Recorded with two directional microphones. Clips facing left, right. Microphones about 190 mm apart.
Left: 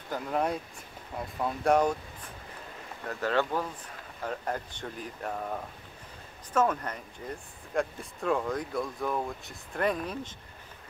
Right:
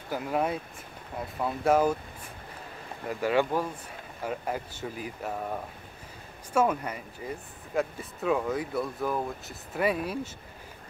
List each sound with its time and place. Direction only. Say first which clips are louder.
0.1 s speech: right 1 dB; 5° right (ahead or behind)